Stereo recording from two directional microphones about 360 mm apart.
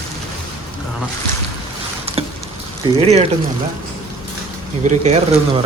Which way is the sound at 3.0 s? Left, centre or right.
Centre.